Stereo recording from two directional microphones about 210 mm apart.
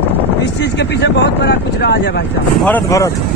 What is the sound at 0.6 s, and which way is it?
Speech, 55° left (ahead or behind).